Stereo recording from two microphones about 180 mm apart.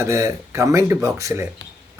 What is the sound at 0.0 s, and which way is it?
Speech, 15° right (ahead or behind).